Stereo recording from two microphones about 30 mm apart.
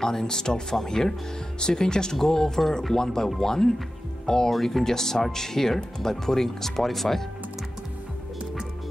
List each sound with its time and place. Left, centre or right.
0.0 s speech: centre
4.5 s speech: centre